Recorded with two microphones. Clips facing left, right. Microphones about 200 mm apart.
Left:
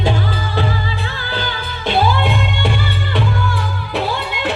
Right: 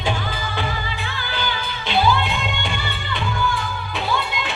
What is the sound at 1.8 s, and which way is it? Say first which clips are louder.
Music: left 3 dB; 50° left (ahead or behind).